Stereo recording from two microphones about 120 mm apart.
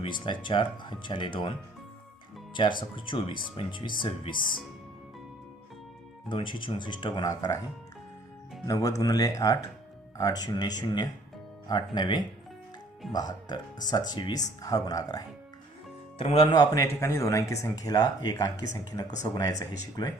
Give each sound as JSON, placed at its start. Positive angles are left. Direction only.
{"t": 0.0, "sound": "speech", "side_deg": 40}
{"t": 6.2, "sound": "speech", "side_deg": 40}
{"t": 8.6, "sound": "speech", "side_deg": 30}
{"t": 16.1, "sound": "speech", "side_deg": 55}
{"t": 16.6, "sound": "speech", "side_deg": 25}